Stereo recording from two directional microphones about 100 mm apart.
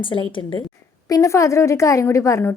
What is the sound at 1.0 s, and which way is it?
A woman's voice, 35° left (ahead or behind).